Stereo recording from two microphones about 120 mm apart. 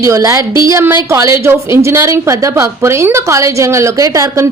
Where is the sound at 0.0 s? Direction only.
25° right (ahead or behind).